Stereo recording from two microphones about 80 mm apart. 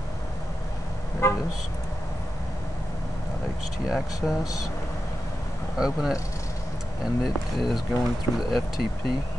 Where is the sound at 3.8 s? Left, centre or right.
Centre.